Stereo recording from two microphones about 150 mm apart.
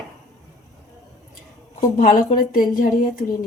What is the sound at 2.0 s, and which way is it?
A woman's voice, 65° left (ahead or behind).